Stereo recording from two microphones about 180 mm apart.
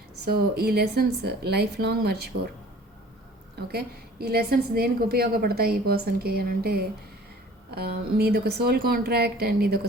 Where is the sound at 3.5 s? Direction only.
60° right (ahead or behind).